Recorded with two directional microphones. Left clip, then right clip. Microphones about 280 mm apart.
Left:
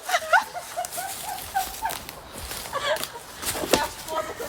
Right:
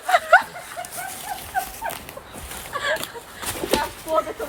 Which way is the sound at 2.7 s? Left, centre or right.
Left.